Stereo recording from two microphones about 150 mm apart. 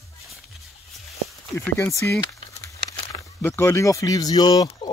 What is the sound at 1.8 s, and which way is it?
Speech, 20° left (ahead or behind).